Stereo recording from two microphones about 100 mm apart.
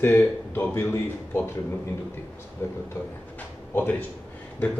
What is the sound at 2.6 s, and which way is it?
Speech, 30° left (ahead or behind).